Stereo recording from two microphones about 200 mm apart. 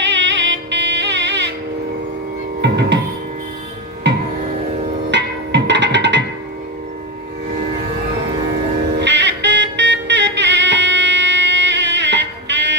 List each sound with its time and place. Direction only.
0.0 s music: 65° right (ahead or behind)
2.6 s music: 60° right (ahead or behind)
5.1 s music: 60° right (ahead or behind)
9.0 s music: 60° right (ahead or behind)